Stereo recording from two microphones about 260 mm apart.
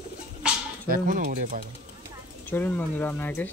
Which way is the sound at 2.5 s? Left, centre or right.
Centre.